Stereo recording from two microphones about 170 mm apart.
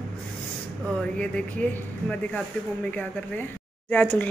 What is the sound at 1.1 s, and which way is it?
Speech, 5° left (ahead or behind).